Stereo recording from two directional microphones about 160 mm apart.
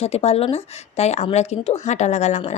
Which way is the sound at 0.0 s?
40° left (ahead or behind).